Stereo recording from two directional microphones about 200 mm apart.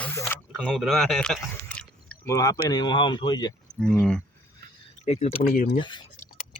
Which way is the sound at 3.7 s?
10° left (ahead or behind).